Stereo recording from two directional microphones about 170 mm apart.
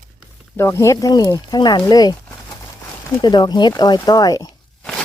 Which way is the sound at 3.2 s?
25° left (ahead or behind).